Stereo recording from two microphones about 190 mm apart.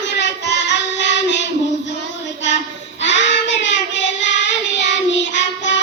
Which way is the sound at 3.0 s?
70° left (ahead or behind).